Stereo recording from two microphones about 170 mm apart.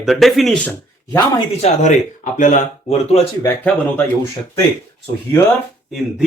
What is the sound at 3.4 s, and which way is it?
Speech, 10° left (ahead or behind).